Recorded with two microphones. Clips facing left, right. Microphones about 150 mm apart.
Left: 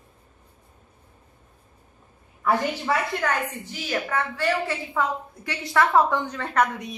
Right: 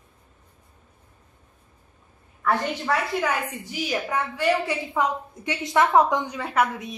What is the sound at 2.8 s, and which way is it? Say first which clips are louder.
A woman's voice: even; centre (ahead or behind).